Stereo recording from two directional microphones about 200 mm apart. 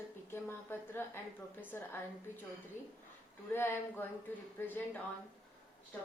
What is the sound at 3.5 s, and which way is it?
A woman's voice, 10° left (ahead or behind).